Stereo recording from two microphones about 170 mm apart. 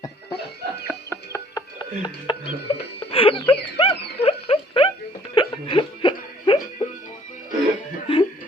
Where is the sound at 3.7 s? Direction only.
35° left (ahead or behind).